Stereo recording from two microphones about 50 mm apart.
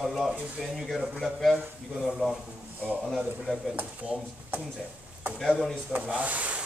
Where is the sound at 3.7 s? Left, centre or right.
Right.